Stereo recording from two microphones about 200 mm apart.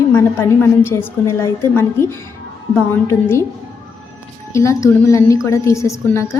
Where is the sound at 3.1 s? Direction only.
10° left (ahead or behind).